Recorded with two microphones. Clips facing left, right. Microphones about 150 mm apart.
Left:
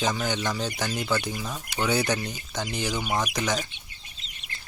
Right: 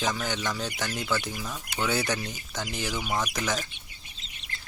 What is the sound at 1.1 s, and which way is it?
Speech, centre (ahead or behind).